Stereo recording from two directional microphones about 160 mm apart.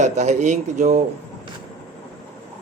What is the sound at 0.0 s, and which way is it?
Speech, 45° right (ahead or behind).